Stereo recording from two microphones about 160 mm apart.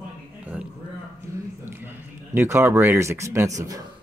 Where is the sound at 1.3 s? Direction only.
20° right (ahead or behind).